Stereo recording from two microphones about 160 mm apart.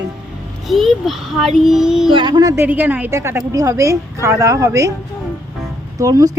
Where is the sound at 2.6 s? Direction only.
10° right (ahead or behind).